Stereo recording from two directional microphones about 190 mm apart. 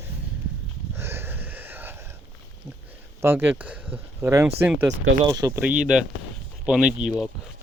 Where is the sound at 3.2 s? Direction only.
10° right (ahead or behind).